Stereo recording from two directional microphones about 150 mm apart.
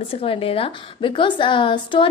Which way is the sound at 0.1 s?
40° left (ahead or behind).